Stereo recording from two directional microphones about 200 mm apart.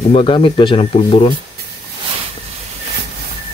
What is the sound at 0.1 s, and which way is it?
Speech, 25° left (ahead or behind).